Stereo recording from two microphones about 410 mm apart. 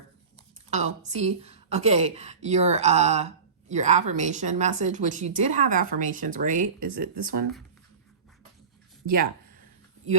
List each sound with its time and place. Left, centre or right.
0.7 s a woman's voice: centre